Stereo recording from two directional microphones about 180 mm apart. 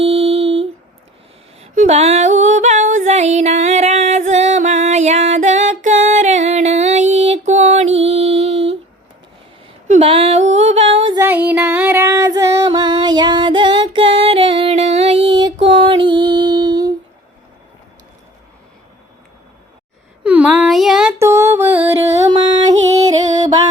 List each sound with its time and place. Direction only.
0.0 s a sound: 35° right (ahead or behind)
1.6 s music: 40° right (ahead or behind)
9.9 s a sound: 35° right (ahead or behind)
10.5 s music: 35° right (ahead or behind)
11.2 s female singing: 10° right (ahead or behind)
15.6 s music: 30° right (ahead or behind)
20.2 s a sound: 5° right (ahead or behind)
21.2 s music: 15° right (ahead or behind)
22.0 s music: 35° right (ahead or behind)